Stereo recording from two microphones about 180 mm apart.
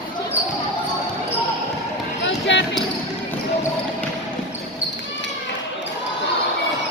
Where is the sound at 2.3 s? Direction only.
90° left.